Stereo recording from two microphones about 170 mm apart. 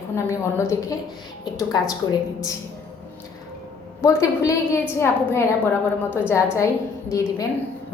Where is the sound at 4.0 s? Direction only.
20° left (ahead or behind).